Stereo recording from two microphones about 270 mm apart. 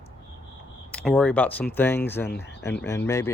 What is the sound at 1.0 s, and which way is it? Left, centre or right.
Speech, centre.